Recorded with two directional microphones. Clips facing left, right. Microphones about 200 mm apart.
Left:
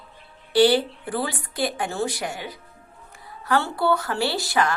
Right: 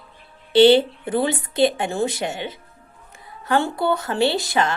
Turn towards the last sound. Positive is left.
turn(degrees=-20)  # may be behind; listen again after turning